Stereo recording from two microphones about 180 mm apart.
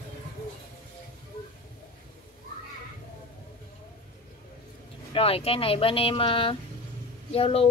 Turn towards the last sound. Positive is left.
turn(degrees=35)  # may be behind; listen again after turning